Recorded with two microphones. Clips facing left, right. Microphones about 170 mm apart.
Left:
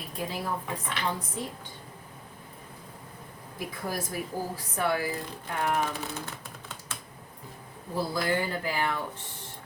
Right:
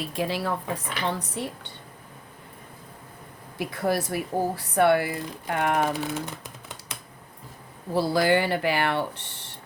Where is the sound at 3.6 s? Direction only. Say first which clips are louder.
Right 8 dB; 70° right (ahead or behind).